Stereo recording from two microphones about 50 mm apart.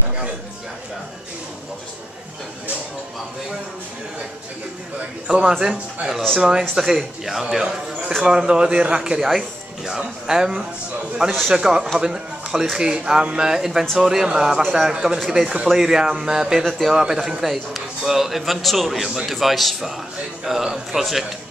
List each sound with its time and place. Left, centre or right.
5.3 s a man's voice: centre
15.1 s a man's voice: centre
17.0 s a man's voice: centre